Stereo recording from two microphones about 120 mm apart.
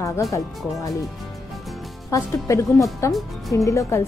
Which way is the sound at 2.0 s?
30° left (ahead or behind).